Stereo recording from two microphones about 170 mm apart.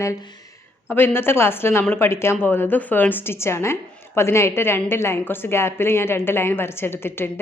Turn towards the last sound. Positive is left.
turn(degrees=15)  # may be behind; listen again after turning